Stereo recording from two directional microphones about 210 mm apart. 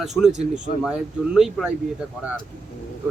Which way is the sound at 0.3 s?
35° right (ahead or behind).